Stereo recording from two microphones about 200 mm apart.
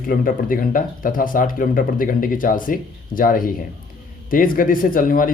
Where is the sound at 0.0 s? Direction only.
45° left (ahead or behind).